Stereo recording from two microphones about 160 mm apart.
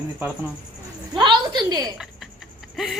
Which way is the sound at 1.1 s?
25° right (ahead or behind).